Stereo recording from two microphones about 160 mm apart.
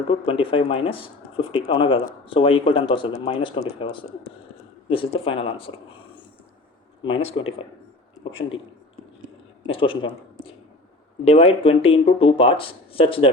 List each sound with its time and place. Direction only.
0.1 s speech: 35° left (ahead or behind)
4.9 s speech: 35° left (ahead or behind)
7.0 s speech: 30° left (ahead or behind)
9.7 s speech: 30° left (ahead or behind)
11.3 s speech: 35° left (ahead or behind)